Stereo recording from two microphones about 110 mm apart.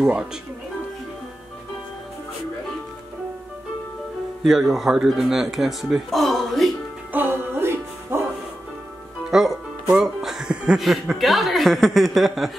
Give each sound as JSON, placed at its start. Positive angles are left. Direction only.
{"t": 4.4, "sound": "speech", "side_deg": -5}
{"t": 7.1, "sound": "music", "side_deg": -20}
{"t": 9.3, "sound": "music", "side_deg": 0}
{"t": 9.8, "sound": "a woman's voice", "side_deg": -5}